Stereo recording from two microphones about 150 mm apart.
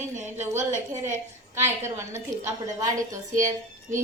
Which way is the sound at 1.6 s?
15° right (ahead or behind).